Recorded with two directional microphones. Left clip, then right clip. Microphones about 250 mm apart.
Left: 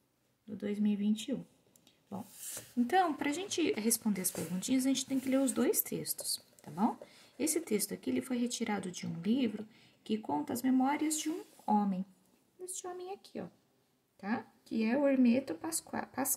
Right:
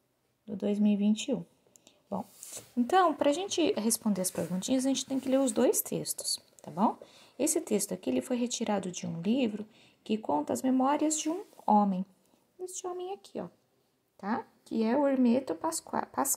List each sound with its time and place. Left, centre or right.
0.6 s speech: centre
2.9 s speech: centre